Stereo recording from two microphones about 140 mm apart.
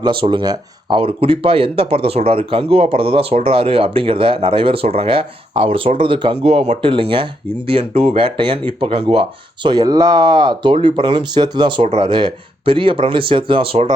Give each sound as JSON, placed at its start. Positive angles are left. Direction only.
{"t": 0.0, "sound": "speech", "side_deg": -35}
{"t": 6.4, "sound": "speech", "side_deg": -50}
{"t": 9.6, "sound": "speech", "side_deg": -30}